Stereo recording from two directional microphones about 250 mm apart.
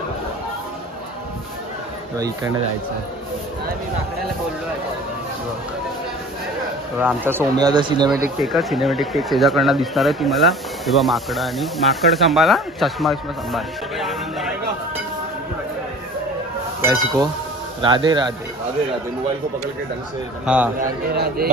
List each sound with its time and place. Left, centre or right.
7.0 s speech: centre
8.4 s speech: centre
16.8 s speech: centre
20.4 s speech: centre
20.8 s a man's voice: right